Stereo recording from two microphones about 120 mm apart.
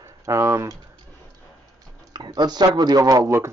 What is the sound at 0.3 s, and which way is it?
Speech, 25° right (ahead or behind).